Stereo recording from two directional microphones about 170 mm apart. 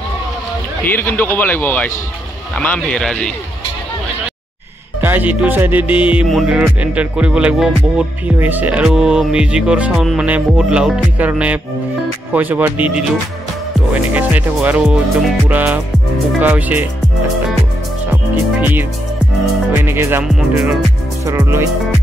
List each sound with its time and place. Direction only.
0.8 s speech: 10° left (ahead or behind)
5.0 s music: 10° right (ahead or behind)
18.1 s music: 10° right (ahead or behind)
19.8 s speech: 15° right (ahead or behind)
21.3 s music: 15° right (ahead or behind)